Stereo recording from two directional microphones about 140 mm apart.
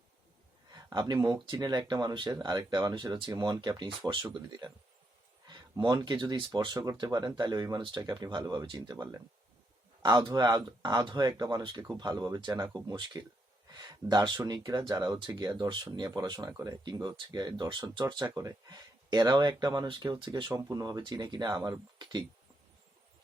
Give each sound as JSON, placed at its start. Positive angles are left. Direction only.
{"t": 0.9, "sound": "speech", "side_deg": -30}